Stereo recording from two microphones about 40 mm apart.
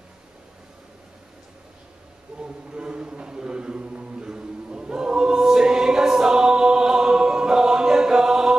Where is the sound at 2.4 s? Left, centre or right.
Right.